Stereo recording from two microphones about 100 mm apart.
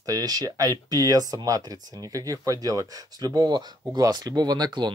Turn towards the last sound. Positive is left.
turn(degrees=-45)  # may be behind; listen again after turning